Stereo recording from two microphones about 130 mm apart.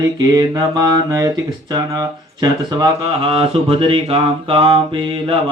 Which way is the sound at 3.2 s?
50° right (ahead or behind).